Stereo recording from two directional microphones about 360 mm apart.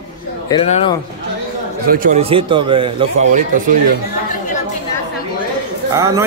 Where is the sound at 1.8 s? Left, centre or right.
Right.